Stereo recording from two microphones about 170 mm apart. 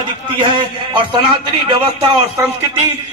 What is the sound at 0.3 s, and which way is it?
A man's voice, 30° right (ahead or behind).